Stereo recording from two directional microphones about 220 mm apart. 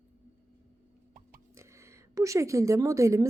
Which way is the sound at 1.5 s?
15° right (ahead or behind).